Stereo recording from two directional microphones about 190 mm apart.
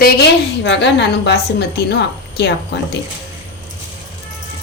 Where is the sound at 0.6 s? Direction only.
70° left (ahead or behind).